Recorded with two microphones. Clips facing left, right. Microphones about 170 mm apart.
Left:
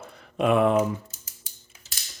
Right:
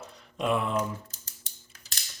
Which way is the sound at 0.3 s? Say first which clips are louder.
Left 7 dB; 60° left (ahead or behind).